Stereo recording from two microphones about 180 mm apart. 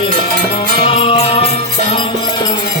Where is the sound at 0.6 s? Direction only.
30° left (ahead or behind).